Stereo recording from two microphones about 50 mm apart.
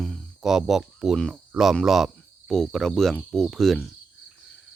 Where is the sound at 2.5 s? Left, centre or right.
Centre.